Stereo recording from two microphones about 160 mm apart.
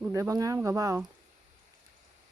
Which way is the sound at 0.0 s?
20° right (ahead or behind).